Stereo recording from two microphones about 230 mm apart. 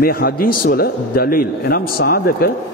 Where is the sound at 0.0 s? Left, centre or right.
Left.